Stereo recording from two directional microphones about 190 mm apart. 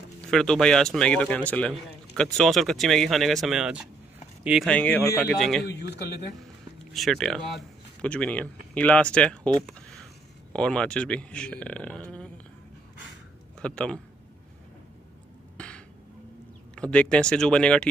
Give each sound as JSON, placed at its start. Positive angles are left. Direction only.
{"t": 0.3, "sound": "speech", "side_deg": 5}
{"t": 5.7, "sound": "a man's voice", "side_deg": 60}
{"t": 6.9, "sound": "speech", "side_deg": 0}
{"t": 13.6, "sound": "speech", "side_deg": 5}
{"t": 15.5, "sound": "a sound", "side_deg": 5}
{"t": 16.7, "sound": "speech", "side_deg": 5}